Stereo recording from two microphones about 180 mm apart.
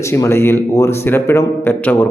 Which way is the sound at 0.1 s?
15° left (ahead or behind).